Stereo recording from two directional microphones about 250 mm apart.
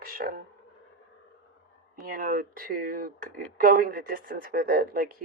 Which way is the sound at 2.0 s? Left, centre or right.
Right.